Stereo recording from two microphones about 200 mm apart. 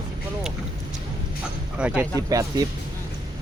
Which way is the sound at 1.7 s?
5° right (ahead or behind).